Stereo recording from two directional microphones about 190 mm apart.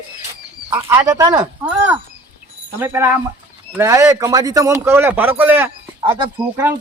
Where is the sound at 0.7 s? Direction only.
15° right (ahead or behind).